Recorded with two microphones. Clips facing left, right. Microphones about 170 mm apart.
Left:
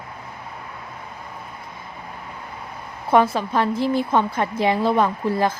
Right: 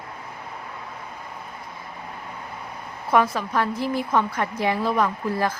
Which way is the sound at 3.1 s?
25° left (ahead or behind).